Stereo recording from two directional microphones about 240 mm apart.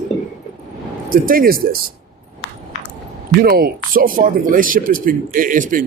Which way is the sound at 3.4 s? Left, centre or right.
Right.